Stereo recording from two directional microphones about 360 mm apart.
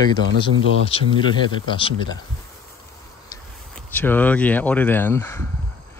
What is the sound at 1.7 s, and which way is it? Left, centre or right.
Speech, centre.